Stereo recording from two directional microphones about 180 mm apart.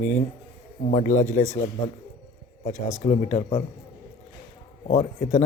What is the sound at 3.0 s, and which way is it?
Speech, 40° left (ahead or behind).